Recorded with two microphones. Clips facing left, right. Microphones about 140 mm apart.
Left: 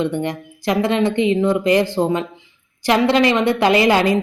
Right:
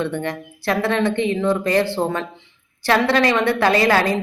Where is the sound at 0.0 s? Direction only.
15° left (ahead or behind).